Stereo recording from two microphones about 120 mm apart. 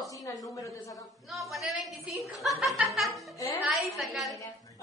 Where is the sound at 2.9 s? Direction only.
Centre (ahead or behind).